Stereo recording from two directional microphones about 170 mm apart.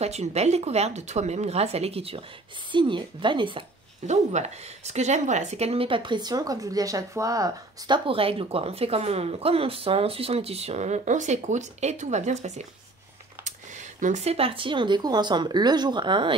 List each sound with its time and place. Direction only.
0.0 s speech: 40° right (ahead or behind)
4.0 s speech: 40° right (ahead or behind); by 8.0 s 20° right (ahead or behind)
8.1 s speech: 35° right (ahead or behind)